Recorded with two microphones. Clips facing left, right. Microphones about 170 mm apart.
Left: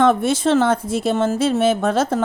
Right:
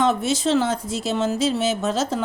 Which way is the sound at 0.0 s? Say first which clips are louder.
Left 4 dB; 55° left (ahead or behind).